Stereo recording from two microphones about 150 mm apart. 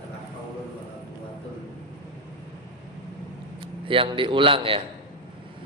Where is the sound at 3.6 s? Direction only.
35° right (ahead or behind).